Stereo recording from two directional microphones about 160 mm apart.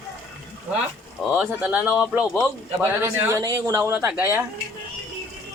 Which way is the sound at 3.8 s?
10° right (ahead or behind).